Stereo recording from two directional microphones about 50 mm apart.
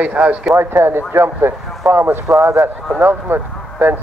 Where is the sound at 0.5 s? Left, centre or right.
Right.